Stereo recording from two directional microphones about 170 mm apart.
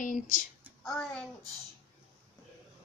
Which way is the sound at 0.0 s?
50° left (ahead or behind).